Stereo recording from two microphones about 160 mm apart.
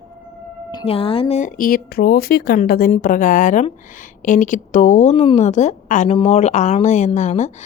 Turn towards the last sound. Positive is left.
turn(degrees=45)  # may be behind; listen again after turning